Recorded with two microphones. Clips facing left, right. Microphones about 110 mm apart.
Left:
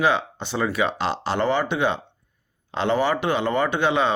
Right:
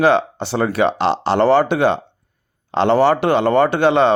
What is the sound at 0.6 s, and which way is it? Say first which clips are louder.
Speech: right 7 dB; 70° right (ahead or behind).